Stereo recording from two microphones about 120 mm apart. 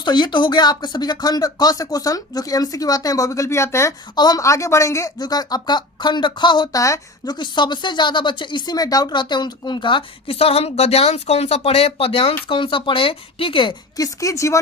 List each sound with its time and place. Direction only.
0.0 s speech: 40° left (ahead or behind); by 3.9 s 25° left (ahead or behind)
4.1 s speech: 35° left (ahead or behind)
6.8 s speech: 25° left (ahead or behind)
7.3 s speech: 40° left (ahead or behind)
13.9 s speech: 30° left (ahead or behind)